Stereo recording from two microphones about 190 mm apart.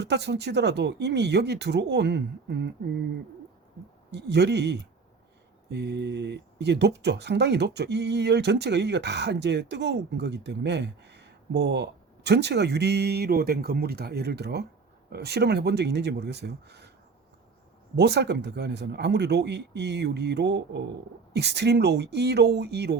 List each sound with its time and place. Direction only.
0.0 s speech: 65° right (ahead or behind)
4.1 s speech: 65° right (ahead or behind)
17.9 s speech: 60° right (ahead or behind)